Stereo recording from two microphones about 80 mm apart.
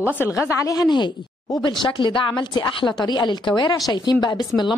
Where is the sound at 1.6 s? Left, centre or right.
Left.